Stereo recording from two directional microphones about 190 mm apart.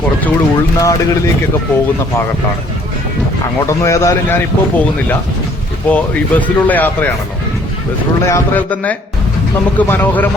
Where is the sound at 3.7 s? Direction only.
15° left (ahead or behind).